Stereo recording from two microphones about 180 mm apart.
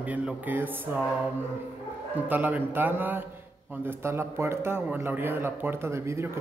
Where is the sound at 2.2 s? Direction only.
10° right (ahead or behind).